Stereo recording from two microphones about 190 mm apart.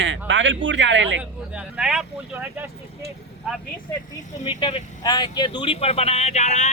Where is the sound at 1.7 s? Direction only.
5° right (ahead or behind).